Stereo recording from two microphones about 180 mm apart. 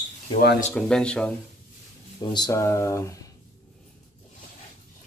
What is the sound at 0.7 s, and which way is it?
Speech, 5° left (ahead or behind).